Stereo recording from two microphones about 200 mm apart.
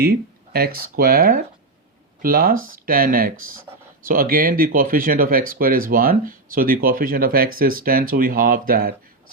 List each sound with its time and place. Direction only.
0.0 s speech: 50° right (ahead or behind)